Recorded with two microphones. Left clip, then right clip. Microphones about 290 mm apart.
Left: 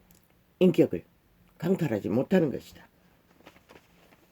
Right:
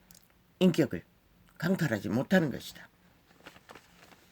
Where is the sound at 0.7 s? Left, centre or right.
Right.